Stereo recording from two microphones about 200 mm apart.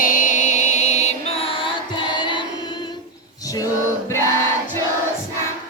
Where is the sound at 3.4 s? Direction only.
15° left (ahead or behind).